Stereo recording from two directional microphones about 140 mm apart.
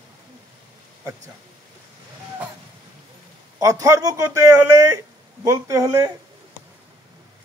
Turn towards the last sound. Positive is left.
turn(degrees=-25)  # may be behind; listen again after turning